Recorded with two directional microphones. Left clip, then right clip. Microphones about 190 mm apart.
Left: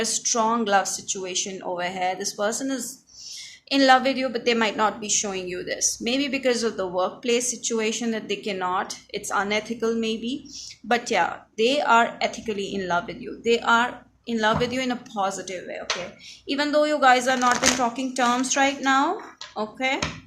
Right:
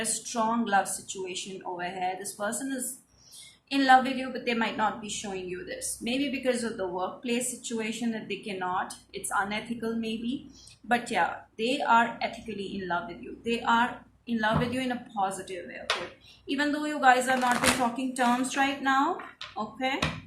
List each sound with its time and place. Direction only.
0.0 s a woman's voice: 50° left (ahead or behind)